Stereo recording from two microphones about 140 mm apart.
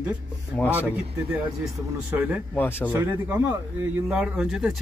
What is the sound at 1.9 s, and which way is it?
A man's voice, 10° right (ahead or behind).